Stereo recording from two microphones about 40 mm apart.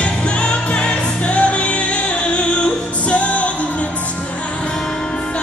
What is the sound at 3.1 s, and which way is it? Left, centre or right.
Music, left.